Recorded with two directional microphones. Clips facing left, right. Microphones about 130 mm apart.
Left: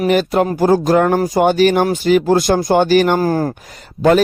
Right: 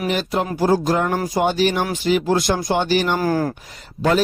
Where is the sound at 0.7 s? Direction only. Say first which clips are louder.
Left 5 dB; 60° left (ahead or behind).